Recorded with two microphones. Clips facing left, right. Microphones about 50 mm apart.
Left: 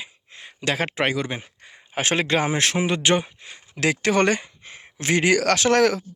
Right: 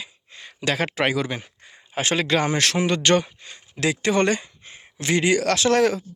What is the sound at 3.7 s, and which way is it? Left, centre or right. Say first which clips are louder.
Speech: left 1 dB; left.